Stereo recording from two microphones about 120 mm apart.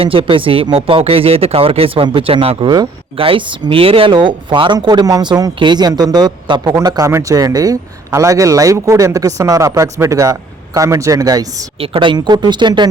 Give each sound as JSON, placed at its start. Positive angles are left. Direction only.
{"t": 0.0, "sound": "speech", "side_deg": -45}
{"t": 11.8, "sound": "speech", "side_deg": -45}